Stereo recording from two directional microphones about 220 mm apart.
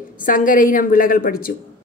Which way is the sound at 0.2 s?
35° left (ahead or behind).